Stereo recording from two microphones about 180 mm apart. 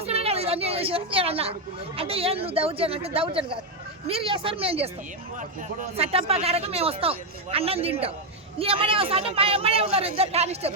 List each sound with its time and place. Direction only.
0.0 s a sound: 35° right (ahead or behind)
2.0 s speech: 30° right (ahead or behind)
6.0 s speech: 35° right (ahead or behind)